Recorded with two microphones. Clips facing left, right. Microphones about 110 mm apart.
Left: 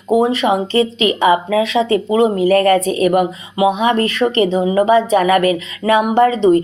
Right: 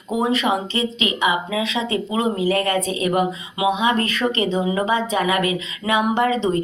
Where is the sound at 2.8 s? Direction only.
25° right (ahead or behind).